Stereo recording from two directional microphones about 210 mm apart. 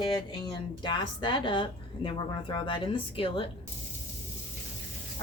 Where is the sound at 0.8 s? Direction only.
20° left (ahead or behind).